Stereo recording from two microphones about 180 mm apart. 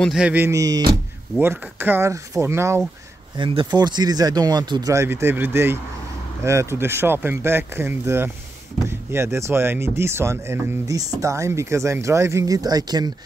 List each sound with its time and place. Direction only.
0.0 s speech: 5° right (ahead or behind)
3.3 s speech: 25° right (ahead or behind)